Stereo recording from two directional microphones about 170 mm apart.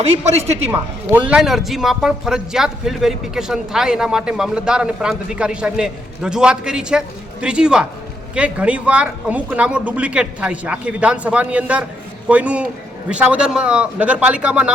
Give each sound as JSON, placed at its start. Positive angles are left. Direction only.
{"t": 0.0, "sound": "a woman's voice", "side_deg": -40}
{"t": 0.7, "sound": "a man's voice", "side_deg": -10}